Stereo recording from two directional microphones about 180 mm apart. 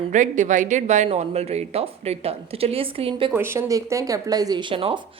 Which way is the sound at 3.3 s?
15° right (ahead or behind).